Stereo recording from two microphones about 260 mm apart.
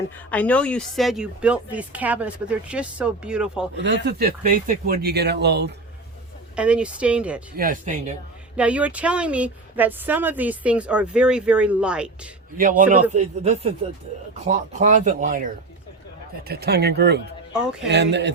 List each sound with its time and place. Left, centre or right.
0.3 s speech: centre
3.8 s speech: right
6.6 s speech: centre
7.5 s speech: right
8.5 s speech: centre
12.5 s a man's voice: right
17.5 s speech: centre
17.8 s speech: right